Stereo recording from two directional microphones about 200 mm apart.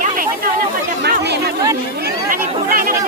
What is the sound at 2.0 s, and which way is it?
Chatter, 45° right (ahead or behind).